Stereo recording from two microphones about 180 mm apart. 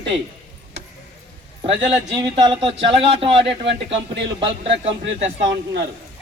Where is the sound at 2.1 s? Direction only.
25° right (ahead or behind).